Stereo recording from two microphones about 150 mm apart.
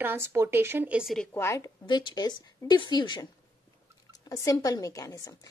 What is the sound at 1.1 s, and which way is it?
Speech, 5° left (ahead or behind).